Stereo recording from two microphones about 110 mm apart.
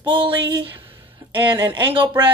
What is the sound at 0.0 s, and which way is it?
Speech, 50° right (ahead or behind).